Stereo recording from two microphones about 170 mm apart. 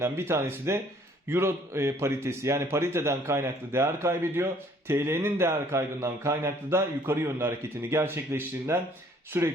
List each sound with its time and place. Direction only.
0.0 s speech: 15° right (ahead or behind)